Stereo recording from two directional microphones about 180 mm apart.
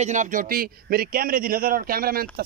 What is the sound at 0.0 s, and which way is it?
Speech, 45° right (ahead or behind).